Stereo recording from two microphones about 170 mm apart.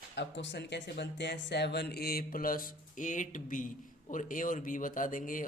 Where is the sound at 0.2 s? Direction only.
90° left.